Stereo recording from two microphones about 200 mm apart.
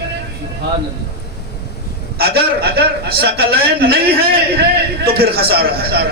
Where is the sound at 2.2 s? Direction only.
50° right (ahead or behind).